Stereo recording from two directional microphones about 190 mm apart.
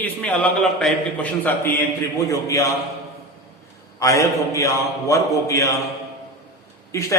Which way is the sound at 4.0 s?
15° left (ahead or behind).